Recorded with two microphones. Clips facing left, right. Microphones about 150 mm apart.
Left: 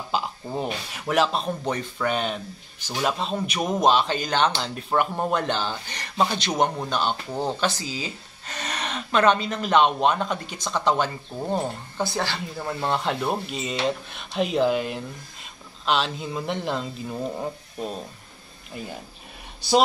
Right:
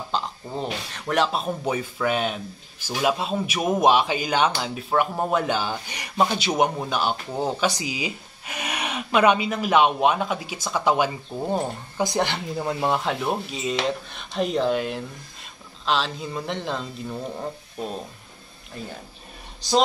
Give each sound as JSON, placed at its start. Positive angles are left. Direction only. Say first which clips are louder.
{"t": 0.1, "sound": "a man's voice", "louder": "left 2 dB", "side_deg": 5}
{"t": 12.9, "sound": "speech", "louder": "even", "side_deg": 0}
{"t": 18.7, "sound": "speech", "louder": "even", "side_deg": 5}